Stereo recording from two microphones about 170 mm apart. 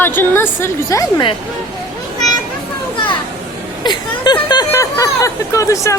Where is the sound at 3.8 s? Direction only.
25° left (ahead or behind).